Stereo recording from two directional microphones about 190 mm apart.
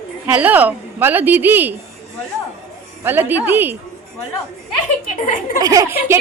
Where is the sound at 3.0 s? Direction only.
10° right (ahead or behind).